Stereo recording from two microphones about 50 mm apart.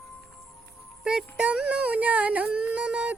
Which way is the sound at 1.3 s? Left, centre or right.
Right.